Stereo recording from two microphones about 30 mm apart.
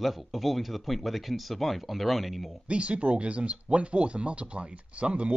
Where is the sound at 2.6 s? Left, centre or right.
Right.